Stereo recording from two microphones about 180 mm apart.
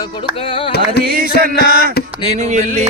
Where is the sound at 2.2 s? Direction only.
40° right (ahead or behind).